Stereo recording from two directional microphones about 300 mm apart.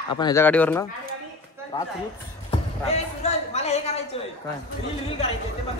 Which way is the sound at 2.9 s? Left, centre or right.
Left.